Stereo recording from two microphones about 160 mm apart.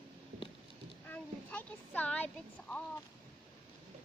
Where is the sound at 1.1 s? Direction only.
10° left (ahead or behind).